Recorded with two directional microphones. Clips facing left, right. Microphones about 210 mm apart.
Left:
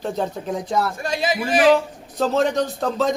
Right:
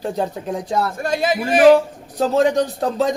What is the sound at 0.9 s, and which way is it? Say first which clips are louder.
Speech: right 3 dB; 55° right (ahead or behind).